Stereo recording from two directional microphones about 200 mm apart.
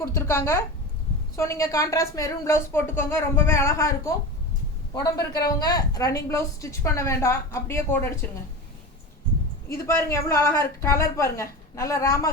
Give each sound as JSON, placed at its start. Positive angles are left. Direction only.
{"t": 0.0, "sound": "a man's voice", "side_deg": 15}
{"t": 9.8, "sound": "speech", "side_deg": 15}